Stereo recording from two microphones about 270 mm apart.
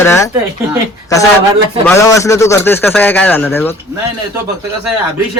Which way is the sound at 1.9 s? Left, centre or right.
Centre.